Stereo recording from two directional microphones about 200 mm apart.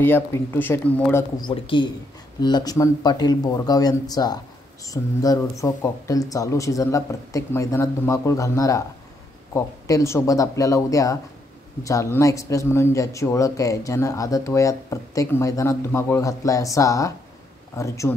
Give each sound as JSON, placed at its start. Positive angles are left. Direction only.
{"t": 0.0, "sound": "speech", "side_deg": 10}
{"t": 1.5, "sound": "speech", "side_deg": 25}